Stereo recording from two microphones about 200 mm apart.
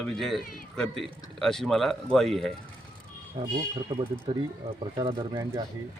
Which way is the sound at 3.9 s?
30° right (ahead or behind).